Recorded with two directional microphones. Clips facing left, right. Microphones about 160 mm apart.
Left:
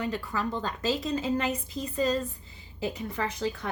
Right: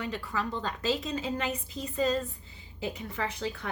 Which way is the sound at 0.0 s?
40° left (ahead or behind).